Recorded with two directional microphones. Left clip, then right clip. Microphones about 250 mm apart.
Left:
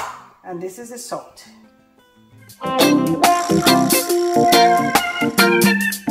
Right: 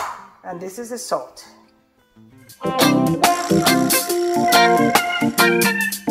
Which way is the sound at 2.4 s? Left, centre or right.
Centre.